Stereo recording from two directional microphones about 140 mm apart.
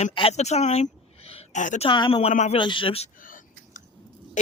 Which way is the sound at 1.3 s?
60° left (ahead or behind).